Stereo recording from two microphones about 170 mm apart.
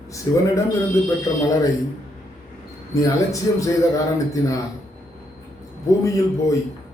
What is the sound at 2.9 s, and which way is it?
Speech, 20° left (ahead or behind).